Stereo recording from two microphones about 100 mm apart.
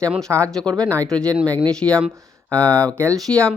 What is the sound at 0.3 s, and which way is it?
Speech, 25° right (ahead or behind).